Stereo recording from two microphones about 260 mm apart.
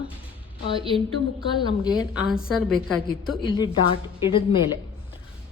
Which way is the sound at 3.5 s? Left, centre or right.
Centre.